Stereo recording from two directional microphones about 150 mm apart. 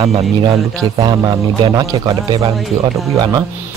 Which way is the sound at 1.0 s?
25° right (ahead or behind).